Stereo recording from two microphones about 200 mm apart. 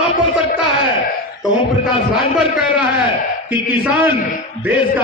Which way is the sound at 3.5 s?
10° right (ahead or behind).